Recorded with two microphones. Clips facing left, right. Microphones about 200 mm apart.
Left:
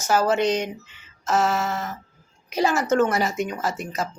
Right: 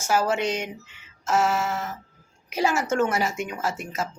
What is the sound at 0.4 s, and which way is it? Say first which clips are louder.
Speech: left 5 dB; 35° left (ahead or behind).